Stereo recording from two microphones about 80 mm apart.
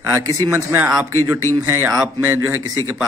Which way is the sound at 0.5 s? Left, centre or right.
Right.